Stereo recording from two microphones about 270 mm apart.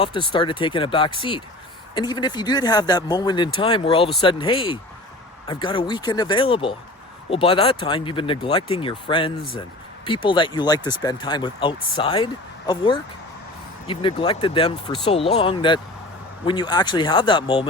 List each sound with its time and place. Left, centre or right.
0.0 s speech: centre